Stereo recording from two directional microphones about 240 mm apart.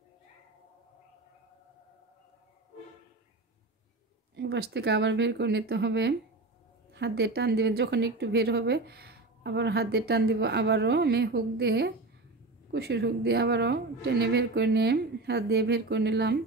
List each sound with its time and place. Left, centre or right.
4.4 s a woman's voice: right